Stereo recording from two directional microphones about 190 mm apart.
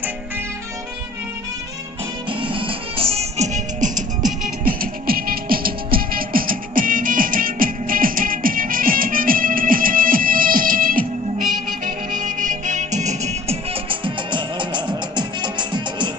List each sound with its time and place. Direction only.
2.2 s music: 25° right (ahead or behind)